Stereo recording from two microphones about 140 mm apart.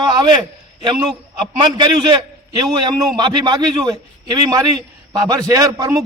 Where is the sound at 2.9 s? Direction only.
30° right (ahead or behind).